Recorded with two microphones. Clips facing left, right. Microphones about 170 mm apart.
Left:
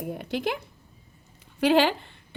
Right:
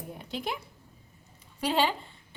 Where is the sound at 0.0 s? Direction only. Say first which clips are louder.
Left 7 dB; 80° left.